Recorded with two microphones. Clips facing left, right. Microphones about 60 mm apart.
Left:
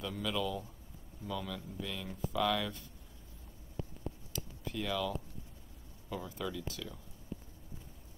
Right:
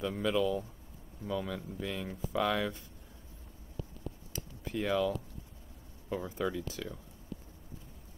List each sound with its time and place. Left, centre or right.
0.0 s speech: right
4.3 s a sound: right
6.0 s speech: right